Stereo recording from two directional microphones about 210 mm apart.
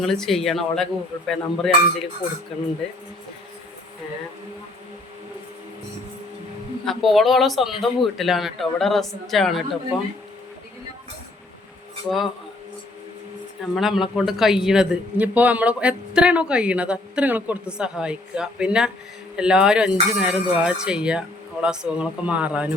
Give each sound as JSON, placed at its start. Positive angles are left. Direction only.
{"t": 0.0, "sound": "a man's voice", "side_deg": 0}
{"t": 6.8, "sound": "a man's voice", "side_deg": 0}
{"t": 13.7, "sound": "a man's voice", "side_deg": 0}